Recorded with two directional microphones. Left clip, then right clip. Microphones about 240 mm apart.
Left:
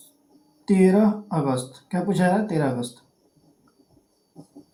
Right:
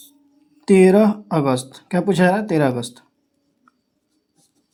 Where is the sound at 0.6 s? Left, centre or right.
Right.